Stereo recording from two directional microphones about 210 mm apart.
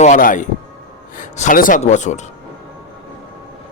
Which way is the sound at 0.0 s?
40° left (ahead or behind).